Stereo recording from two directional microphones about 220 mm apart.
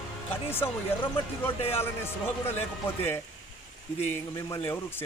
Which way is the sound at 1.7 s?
10° left (ahead or behind).